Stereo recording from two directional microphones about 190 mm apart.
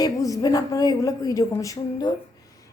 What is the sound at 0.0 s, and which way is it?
Speech, 20° left (ahead or behind).